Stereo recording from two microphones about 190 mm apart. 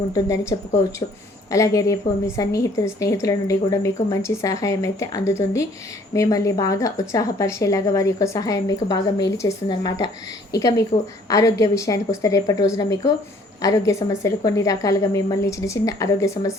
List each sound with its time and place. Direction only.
1.5 s a woman's voice: 15° left (ahead or behind)